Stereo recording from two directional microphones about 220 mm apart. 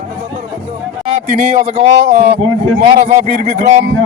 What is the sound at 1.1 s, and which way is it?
Speech, 35° right (ahead or behind).